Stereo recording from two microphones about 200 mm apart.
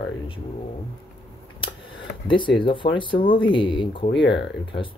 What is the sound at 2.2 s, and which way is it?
Speech, 25° left (ahead or behind).